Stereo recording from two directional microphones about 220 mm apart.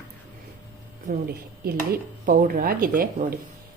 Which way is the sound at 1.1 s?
35° right (ahead or behind).